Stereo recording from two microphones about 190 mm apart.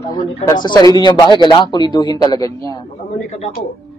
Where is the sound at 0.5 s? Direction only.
20° left (ahead or behind).